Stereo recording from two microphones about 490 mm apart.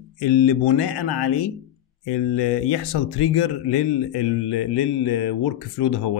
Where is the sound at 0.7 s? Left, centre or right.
Left.